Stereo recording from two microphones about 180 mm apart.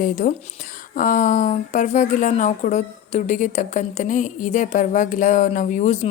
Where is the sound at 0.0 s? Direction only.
45° left (ahead or behind).